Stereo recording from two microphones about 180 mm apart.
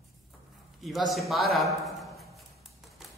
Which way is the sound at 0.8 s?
Centre (ahead or behind).